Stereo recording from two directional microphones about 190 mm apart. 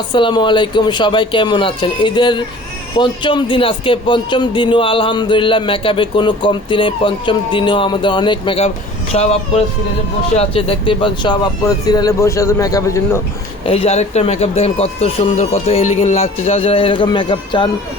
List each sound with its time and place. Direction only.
0.1 s speech: 25° left (ahead or behind)
10.3 s speech: 30° left (ahead or behind)
13.7 s speech: 35° left (ahead or behind)